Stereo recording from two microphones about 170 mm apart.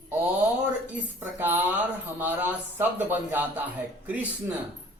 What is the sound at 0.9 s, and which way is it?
A woman's voice, 10° right (ahead or behind).